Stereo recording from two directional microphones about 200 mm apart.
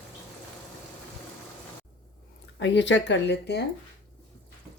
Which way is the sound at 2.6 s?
60° left (ahead or behind).